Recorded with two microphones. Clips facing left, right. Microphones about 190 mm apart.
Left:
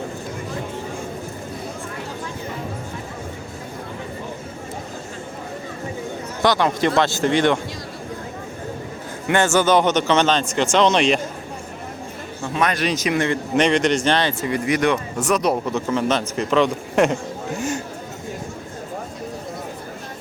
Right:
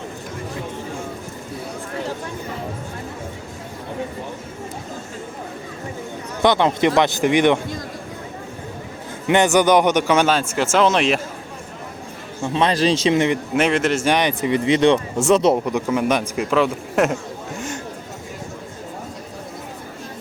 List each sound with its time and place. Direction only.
6.4 s a man's voice: 20° right (ahead or behind)
9.2 s a man's voice: 20° right (ahead or behind); by 11.2 s 5° right (ahead or behind)
12.4 s speech: 25° right (ahead or behind)
13.6 s speech: 5° right (ahead or behind); by 15.5 s 25° right (ahead or behind)
15.6 s a man's voice: 10° right (ahead or behind)